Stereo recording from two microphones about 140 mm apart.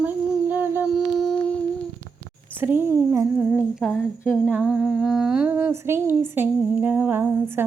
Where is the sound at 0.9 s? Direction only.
Centre (ahead or behind).